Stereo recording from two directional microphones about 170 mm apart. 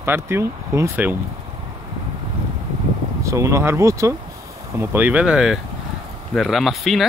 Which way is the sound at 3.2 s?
15° right (ahead or behind).